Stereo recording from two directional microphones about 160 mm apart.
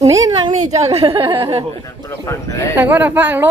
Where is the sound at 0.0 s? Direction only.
20° right (ahead or behind).